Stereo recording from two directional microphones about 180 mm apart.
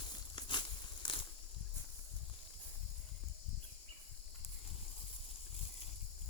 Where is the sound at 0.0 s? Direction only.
25° left (ahead or behind).